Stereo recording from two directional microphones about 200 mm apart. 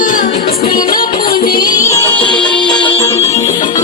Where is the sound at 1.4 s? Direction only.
20° left (ahead or behind).